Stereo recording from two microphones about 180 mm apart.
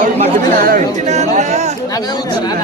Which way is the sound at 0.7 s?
45° right (ahead or behind).